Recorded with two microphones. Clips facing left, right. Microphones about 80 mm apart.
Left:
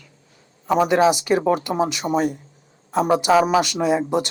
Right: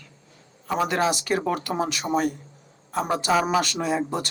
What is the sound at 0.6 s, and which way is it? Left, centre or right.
A woman's voice, centre.